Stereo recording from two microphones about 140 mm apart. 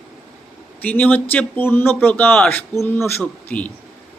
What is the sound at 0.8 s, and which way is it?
Speech, 10° left (ahead or behind).